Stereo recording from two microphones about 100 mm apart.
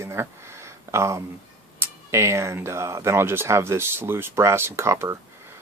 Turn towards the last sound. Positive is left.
turn(degrees=-25)  # may be behind; listen again after turning